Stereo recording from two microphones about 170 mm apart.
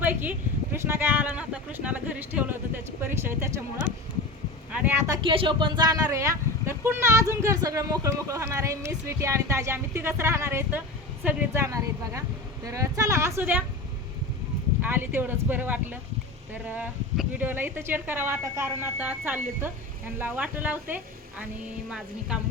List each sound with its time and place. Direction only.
0.0 s speech: 10° right (ahead or behind)
14.8 s speech: 10° right (ahead or behind)